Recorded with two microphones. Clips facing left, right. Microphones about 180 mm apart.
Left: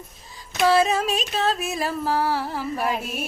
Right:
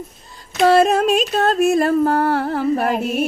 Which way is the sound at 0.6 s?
55° right (ahead or behind).